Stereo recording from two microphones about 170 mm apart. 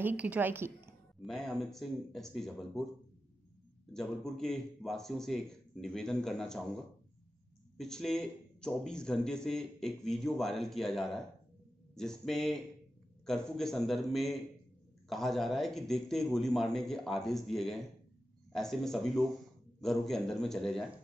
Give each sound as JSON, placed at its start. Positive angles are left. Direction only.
{"t": 0.0, "sound": "a woman's voice", "side_deg": -10}
{"t": 1.2, "sound": "speech", "side_deg": 0}
{"t": 3.9, "sound": "speech", "side_deg": 0}